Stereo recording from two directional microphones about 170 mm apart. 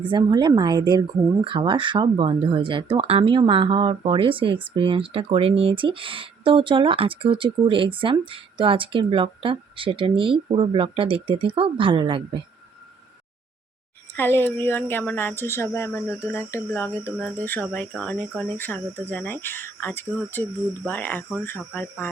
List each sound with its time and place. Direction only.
0.1 s speech: 25° right (ahead or behind)
14.2 s speech: 15° left (ahead or behind)